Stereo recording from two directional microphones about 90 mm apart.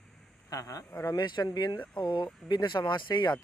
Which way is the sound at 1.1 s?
50° left (ahead or behind).